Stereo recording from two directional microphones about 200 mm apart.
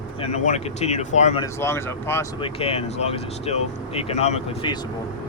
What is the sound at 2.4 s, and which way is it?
Speech, 30° left (ahead or behind).